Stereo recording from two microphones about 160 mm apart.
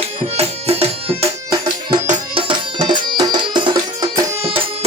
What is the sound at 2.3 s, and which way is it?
Music, 30° right (ahead or behind).